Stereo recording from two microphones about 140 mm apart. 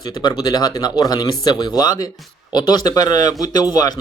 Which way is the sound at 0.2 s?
30° left (ahead or behind).